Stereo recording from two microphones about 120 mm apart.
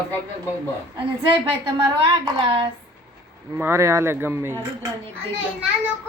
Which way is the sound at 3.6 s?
20° right (ahead or behind).